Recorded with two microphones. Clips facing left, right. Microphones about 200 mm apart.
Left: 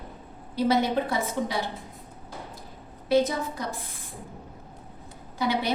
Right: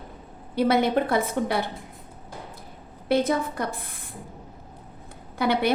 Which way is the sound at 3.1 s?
55° right (ahead or behind).